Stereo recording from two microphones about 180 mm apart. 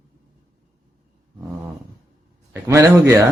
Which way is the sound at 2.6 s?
15° right (ahead or behind).